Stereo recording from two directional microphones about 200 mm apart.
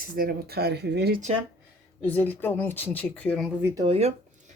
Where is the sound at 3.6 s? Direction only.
10° right (ahead or behind).